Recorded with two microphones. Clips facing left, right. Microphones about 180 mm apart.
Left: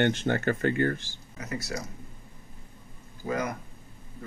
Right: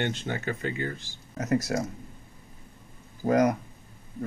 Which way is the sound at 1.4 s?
45° right (ahead or behind).